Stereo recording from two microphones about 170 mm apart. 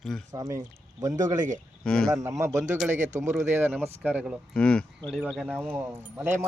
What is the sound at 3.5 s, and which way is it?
Speech, 10° right (ahead or behind).